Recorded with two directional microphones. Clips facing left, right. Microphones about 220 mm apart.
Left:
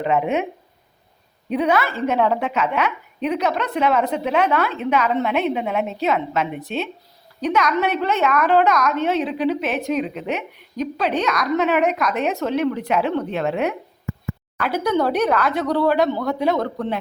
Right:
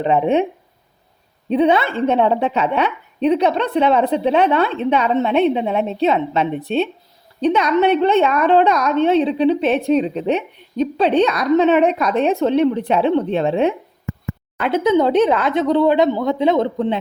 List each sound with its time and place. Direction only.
0.0 s a woman's voice: 30° right (ahead or behind)
1.5 s a woman's voice: 25° right (ahead or behind)